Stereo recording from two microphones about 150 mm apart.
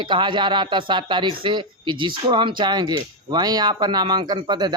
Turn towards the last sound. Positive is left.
turn(degrees=-30)  # may be behind; listen again after turning